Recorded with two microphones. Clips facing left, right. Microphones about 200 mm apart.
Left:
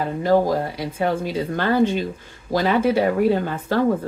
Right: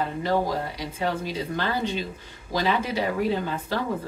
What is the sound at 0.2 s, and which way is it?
Speech, 50° left (ahead or behind).